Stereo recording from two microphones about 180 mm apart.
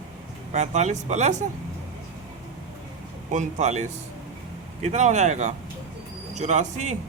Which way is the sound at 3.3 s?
40° right (ahead or behind).